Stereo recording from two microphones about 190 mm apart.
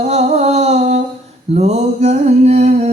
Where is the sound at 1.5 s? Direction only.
35° right (ahead or behind).